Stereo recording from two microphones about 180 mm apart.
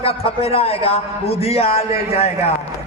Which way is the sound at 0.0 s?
35° left (ahead or behind).